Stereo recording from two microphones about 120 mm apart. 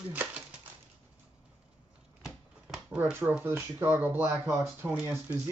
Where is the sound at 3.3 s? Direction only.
15° right (ahead or behind).